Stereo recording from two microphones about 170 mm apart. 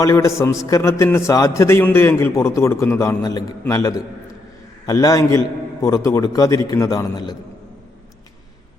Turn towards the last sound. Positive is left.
turn(degrees=20)  # may be behind; listen again after turning